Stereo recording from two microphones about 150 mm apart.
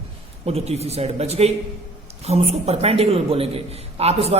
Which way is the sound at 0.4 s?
45° right (ahead or behind).